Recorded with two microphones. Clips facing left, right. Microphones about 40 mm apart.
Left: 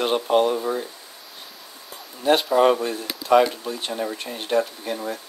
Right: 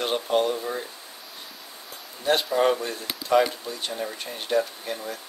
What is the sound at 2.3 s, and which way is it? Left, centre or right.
Speech, centre.